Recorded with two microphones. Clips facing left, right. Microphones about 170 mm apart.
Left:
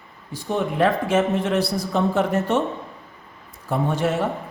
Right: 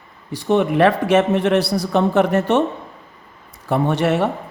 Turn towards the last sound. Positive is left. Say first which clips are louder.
# right 4 dB
turn(degrees=-70)  # may be behind; listen again after turning